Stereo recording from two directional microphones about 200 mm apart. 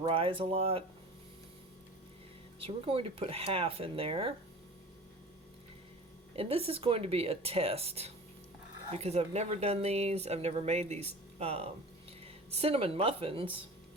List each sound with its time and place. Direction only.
0.0 s speech: 25° right (ahead or behind)
2.6 s speech: 25° right (ahead or behind)
6.3 s speech: 30° right (ahead or behind)